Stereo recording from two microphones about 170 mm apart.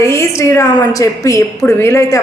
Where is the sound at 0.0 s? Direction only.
15° left (ahead or behind).